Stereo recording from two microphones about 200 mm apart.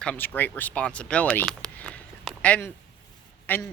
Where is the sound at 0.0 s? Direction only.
5° left (ahead or behind).